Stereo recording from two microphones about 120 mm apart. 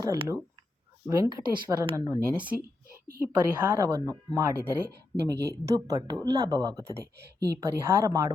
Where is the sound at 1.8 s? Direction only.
45° right (ahead or behind).